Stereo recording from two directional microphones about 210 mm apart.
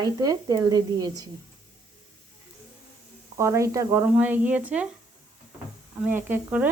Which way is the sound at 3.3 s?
15° right (ahead or behind).